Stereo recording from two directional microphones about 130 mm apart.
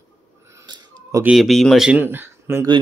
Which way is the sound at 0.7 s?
35° right (ahead or behind).